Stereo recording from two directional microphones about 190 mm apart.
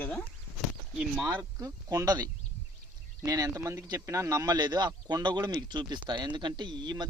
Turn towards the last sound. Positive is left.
turn(degrees=-25)  # may be behind; listen again after turning